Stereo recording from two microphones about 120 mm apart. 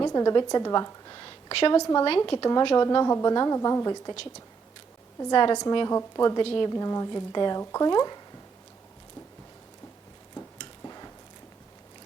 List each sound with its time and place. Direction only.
0.0 s a woman's voice: 30° left (ahead or behind)
1.8 s a woman's voice: 30° left (ahead or behind)
2.0 s speech: 45° left (ahead or behind)
2.8 s a woman's voice: 30° left (ahead or behind)
5.3 s a woman's voice: 40° left (ahead or behind)
6.3 s speech: 45° left (ahead or behind)
6.7 s a woman's voice: 30° left (ahead or behind)
10.6 s a sound: 35° left (ahead or behind)